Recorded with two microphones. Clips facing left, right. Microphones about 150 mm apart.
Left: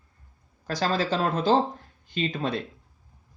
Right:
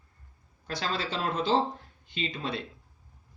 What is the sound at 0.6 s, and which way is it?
Speech, 40° left (ahead or behind).